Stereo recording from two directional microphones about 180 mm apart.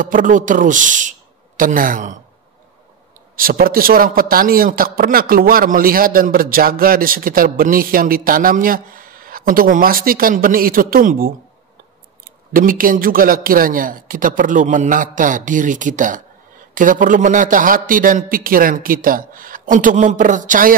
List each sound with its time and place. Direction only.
0.0 s a man's voice: 50° right (ahead or behind)
3.3 s a man's voice: 55° right (ahead or behind)
12.5 s a man's voice: 50° right (ahead or behind)